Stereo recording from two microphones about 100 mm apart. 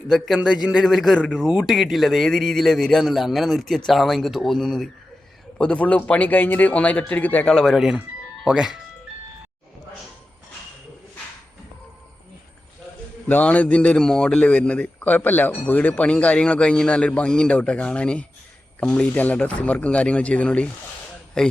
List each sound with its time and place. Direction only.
0.1 s a man's voice: 5° right (ahead or behind); by 7.5 s 15° left (ahead or behind)
7.5 s speech: centre (ahead or behind)
13.2 s a man's voice: 15° left (ahead or behind)